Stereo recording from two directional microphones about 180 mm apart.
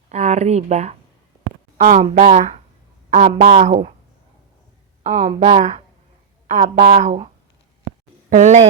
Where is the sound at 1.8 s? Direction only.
45° right (ahead or behind).